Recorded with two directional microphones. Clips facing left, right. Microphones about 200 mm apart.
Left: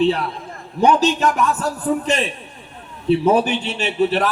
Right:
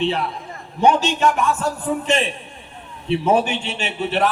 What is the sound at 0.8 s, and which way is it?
A man's voice, 40° left (ahead or behind).